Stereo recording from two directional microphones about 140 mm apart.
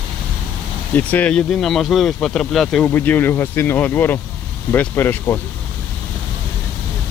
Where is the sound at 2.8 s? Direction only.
15° left (ahead or behind).